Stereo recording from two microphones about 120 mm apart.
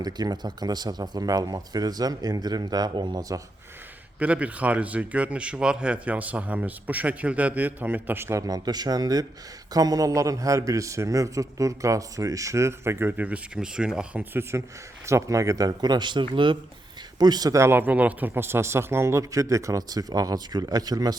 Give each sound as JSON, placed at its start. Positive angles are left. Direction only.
{"t": 0.0, "sound": "speech", "side_deg": -35}
{"t": 4.2, "sound": "a man's voice", "side_deg": -10}